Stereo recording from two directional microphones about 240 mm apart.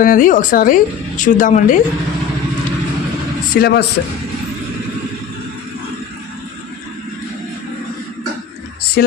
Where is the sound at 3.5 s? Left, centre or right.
Left.